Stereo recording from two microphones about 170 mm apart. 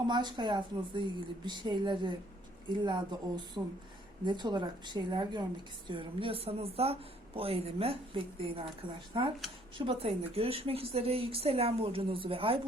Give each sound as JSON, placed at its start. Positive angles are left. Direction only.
{"t": 0.1, "sound": "a woman's voice", "side_deg": -25}